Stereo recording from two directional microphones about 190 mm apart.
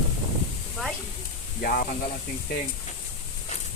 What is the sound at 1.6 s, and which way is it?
Speech, 50° left (ahead or behind).